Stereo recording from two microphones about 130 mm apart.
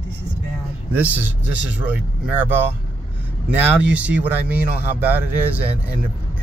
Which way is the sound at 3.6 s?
10° right (ahead or behind).